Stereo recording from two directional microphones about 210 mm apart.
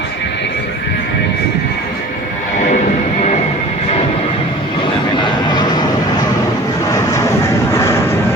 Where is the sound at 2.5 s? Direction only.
35° left (ahead or behind).